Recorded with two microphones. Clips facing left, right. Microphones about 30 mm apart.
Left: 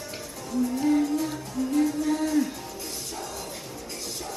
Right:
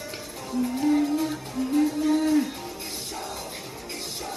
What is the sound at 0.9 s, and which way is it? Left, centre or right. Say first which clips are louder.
Music: right 2 dB; centre.